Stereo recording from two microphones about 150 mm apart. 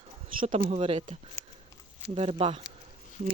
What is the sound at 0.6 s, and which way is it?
Speech, 40° right (ahead or behind).